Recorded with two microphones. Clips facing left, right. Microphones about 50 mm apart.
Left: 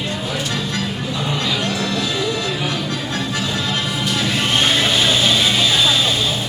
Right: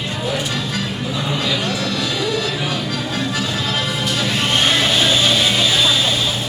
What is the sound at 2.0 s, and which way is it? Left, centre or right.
Music, centre.